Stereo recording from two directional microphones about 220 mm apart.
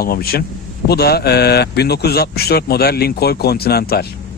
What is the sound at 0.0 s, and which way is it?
Speech, 45° left (ahead or behind).